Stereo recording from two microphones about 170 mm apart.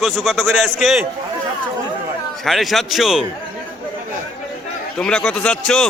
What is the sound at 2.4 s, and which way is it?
Speech, centre (ahead or behind).